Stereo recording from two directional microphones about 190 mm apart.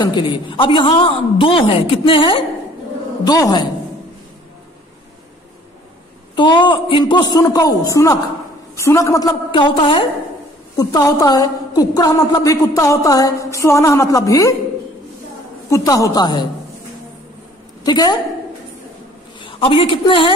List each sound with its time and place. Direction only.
0.0 s a woman's voice: 25° left (ahead or behind)
6.3 s a woman's voice: 25° left (ahead or behind)
15.7 s a woman's voice: 20° left (ahead or behind)
17.8 s a woman's voice: 20° left (ahead or behind)
19.4 s a man's voice: 25° left (ahead or behind)